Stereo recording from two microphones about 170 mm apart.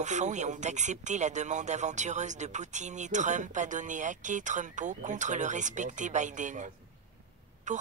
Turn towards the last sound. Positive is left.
turn(degrees=-45)  # may be behind; listen again after turning